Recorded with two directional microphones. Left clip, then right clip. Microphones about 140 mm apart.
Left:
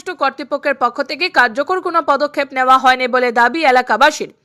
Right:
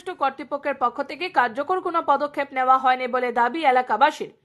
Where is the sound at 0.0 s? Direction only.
20° left (ahead or behind).